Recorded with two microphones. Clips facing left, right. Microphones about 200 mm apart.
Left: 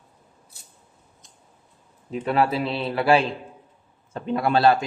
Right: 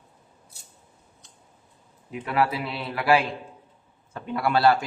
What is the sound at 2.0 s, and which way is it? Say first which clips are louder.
Speech: left 3 dB; 30° left (ahead or behind).